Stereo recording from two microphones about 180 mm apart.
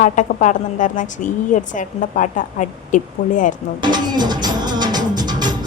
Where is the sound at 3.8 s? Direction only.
25° right (ahead or behind).